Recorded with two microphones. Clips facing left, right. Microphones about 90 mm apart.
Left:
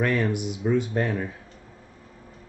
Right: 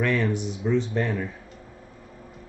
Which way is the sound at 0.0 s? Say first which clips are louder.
Even; 10° left (ahead or behind).